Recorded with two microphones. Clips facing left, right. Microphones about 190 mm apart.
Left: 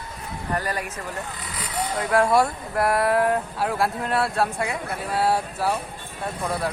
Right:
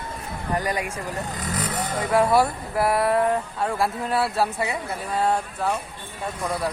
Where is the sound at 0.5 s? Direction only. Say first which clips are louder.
Right 2 dB; 15° right (ahead or behind).